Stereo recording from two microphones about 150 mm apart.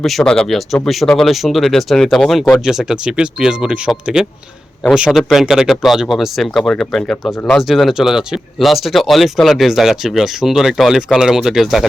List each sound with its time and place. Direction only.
0.0 s speech: centre (ahead or behind)